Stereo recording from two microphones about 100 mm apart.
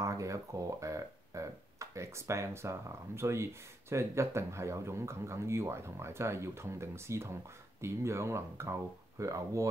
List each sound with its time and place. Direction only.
0.0 s speech: 30° right (ahead or behind)